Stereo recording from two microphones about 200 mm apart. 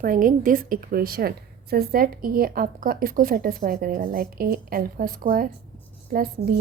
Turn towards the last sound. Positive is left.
turn(degrees=-45)  # may be behind; listen again after turning